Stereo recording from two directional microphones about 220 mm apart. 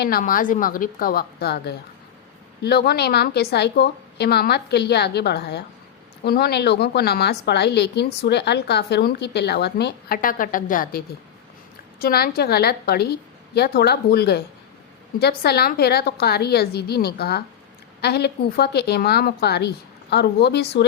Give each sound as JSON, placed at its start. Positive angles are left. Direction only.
{"t": 0.0, "sound": "a woman's voice", "side_deg": 40}